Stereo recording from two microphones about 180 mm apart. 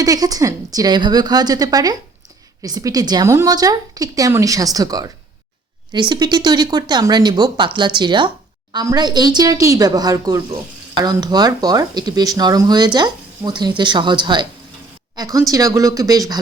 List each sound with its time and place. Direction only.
0.0 s speech: 20° right (ahead or behind)